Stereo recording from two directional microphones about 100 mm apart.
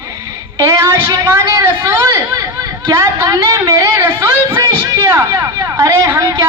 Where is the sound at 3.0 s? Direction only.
35° right (ahead or behind).